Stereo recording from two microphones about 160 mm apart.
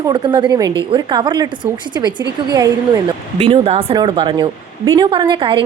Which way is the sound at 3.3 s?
35° right (ahead or behind).